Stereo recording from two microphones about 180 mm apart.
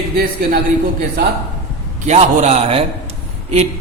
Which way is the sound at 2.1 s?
40° right (ahead or behind).